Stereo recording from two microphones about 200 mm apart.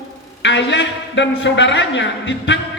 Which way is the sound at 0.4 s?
65° left (ahead or behind).